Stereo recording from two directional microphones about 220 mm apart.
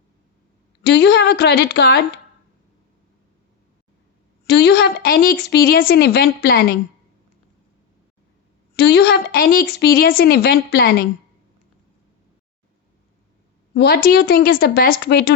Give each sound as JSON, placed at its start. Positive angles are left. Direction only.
{"t": 0.9, "sound": "a woman's voice", "side_deg": 50}
{"t": 4.4, "sound": "a woman's voice", "side_deg": 50}
{"t": 8.7, "sound": "a woman's voice", "side_deg": 50}
{"t": 13.7, "sound": "a woman's voice", "side_deg": 45}